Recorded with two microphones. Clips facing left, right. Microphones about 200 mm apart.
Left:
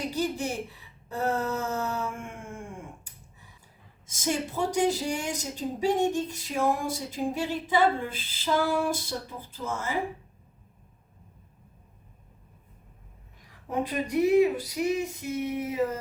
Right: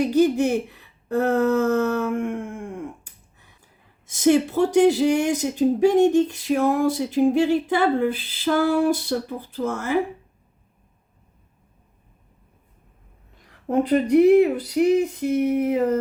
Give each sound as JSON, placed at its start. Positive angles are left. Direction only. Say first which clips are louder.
{"t": 0.1, "sound": "speech", "louder": "right 12 dB", "side_deg": -65}
{"t": 4.0, "sound": "speech", "louder": "right 12 dB", "side_deg": -65}
{"t": 13.7, "sound": "speech", "louder": "right 11 dB", "side_deg": -60}